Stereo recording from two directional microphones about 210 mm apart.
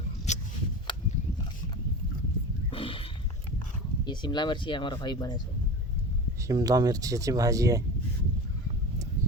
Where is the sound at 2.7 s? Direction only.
25° left (ahead or behind).